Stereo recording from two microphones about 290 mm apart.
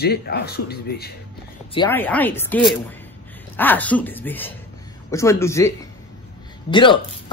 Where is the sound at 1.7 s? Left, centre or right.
Centre.